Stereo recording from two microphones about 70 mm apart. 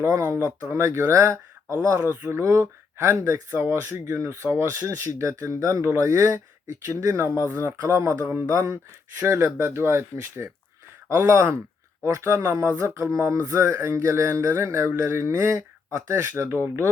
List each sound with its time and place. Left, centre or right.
0.0 s speech: right
2.3 s speech: right
4.6 s speech: right
12.1 s speech: right